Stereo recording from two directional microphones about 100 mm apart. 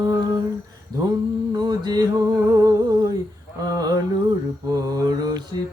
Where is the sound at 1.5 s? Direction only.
45° right (ahead or behind).